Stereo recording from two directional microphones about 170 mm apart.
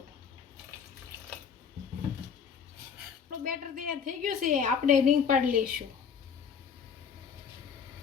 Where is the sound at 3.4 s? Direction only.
55° right (ahead or behind).